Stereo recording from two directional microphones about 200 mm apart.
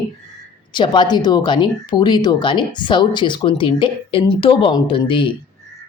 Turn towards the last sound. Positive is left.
turn(degrees=25)  # may be behind; listen again after turning